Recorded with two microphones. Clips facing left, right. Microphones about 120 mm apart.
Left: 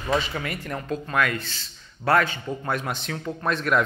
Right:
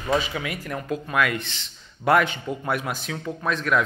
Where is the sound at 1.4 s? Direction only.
15° right (ahead or behind); by 3.8 s centre (ahead or behind).